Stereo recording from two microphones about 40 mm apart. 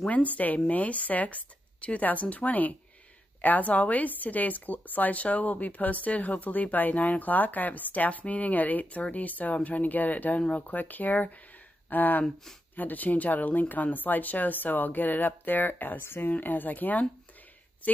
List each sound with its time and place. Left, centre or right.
0.1 s speech: left
16.0 s speech: left
16.3 s speech: left